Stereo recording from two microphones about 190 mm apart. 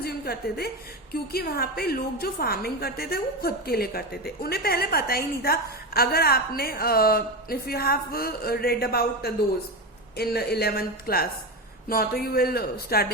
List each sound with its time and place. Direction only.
0.0 s a woman's voice: 55° left (ahead or behind)